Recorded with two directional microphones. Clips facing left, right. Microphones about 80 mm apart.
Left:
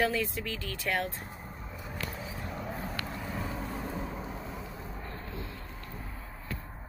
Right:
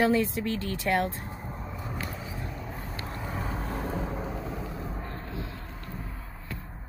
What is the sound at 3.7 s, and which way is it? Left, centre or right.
Vehicle, right.